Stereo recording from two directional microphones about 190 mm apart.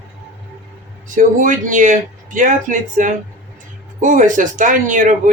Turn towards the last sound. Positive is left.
turn(degrees=-45)  # may be behind; listen again after turning